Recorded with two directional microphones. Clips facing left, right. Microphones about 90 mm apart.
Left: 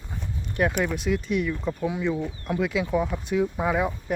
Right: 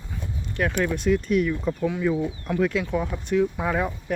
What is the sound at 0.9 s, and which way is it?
Speech, 5° left (ahead or behind).